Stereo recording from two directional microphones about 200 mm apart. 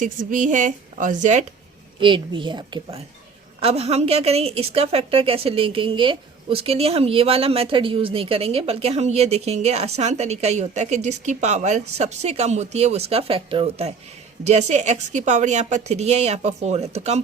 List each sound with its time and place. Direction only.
0.0 s a woman's voice: 40° right (ahead or behind)
2.0 s a woman's voice: 25° right (ahead or behind)